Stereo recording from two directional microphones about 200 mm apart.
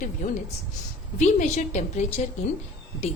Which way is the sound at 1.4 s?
35° left (ahead or behind).